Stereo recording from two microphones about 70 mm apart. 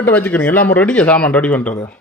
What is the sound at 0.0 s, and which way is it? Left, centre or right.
A man's voice, left.